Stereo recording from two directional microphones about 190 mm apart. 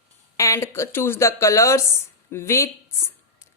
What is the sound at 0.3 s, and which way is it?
Speech, 15° left (ahead or behind).